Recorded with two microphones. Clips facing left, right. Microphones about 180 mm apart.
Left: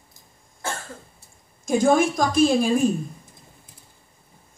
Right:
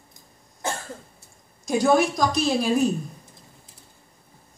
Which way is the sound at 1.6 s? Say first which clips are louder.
Left 1 dB; 50° left (ahead or behind).